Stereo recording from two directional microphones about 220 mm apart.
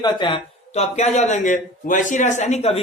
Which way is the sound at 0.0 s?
20° left (ahead or behind).